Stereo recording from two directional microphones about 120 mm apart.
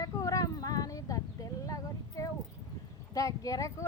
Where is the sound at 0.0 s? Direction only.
30° left (ahead or behind).